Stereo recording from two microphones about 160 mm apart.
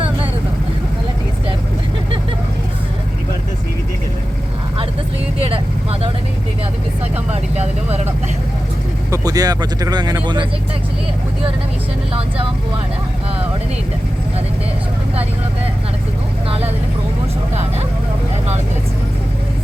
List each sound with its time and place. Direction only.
5.4 s vehicle: 35° right (ahead or behind)
7.3 s vehicle: 45° right (ahead or behind)
9.0 s speech: 20° right (ahead or behind)
16.5 s vehicle: 40° right (ahead or behind)